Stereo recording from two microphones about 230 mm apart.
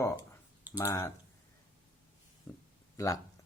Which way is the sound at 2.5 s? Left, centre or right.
Centre.